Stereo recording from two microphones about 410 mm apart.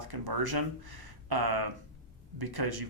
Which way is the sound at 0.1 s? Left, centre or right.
Right.